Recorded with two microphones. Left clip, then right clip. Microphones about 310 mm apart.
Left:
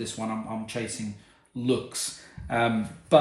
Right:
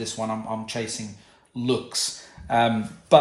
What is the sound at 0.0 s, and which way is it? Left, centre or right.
Speech, right.